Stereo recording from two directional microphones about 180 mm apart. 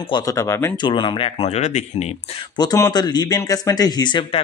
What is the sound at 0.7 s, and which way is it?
Speech, 25° left (ahead or behind).